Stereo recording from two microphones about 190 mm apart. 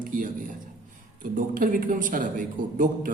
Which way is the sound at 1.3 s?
45° right (ahead or behind).